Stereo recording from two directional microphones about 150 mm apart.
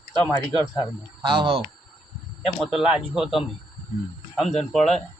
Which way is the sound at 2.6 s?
5° right (ahead or behind).